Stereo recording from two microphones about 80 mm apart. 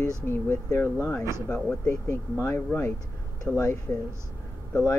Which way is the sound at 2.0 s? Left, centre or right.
Left.